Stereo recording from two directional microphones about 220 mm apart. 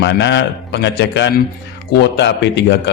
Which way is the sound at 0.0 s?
50° left (ahead or behind).